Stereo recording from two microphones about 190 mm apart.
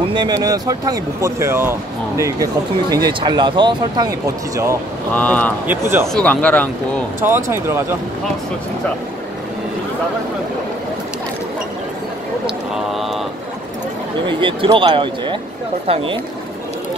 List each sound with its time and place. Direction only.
0.1 s speech: 20° right (ahead or behind)
5.1 s speech: 10° left (ahead or behind)
5.7 s speech: 10° right (ahead or behind)
6.1 s speech: 5° left (ahead or behind)
7.2 s speech: 10° right (ahead or behind)
12.4 s speech: centre (ahead or behind)
14.2 s speech: 25° right (ahead or behind)